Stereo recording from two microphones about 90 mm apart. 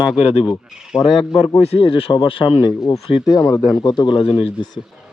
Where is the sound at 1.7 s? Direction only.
85° left.